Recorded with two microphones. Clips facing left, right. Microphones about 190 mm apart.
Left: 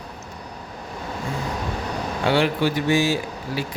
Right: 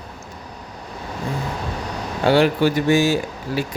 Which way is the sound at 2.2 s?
40° right (ahead or behind).